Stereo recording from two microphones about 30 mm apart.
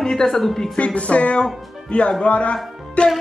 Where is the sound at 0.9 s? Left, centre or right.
Left.